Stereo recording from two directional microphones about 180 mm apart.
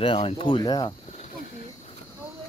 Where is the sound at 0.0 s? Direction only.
30° left (ahead or behind).